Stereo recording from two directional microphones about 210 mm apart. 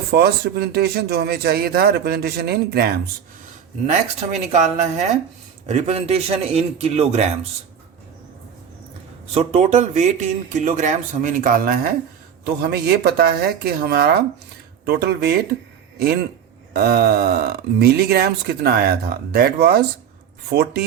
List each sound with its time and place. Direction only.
0.1 s speech: 50° right (ahead or behind)
4.5 s a man's voice: 30° right (ahead or behind)
9.3 s speech: 30° right (ahead or behind); by 15.4 s 50° right (ahead or behind)
16.7 s speech: 50° right (ahead or behind)